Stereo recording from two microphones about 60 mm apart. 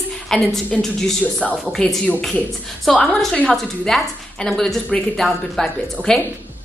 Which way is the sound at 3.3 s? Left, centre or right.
Centre.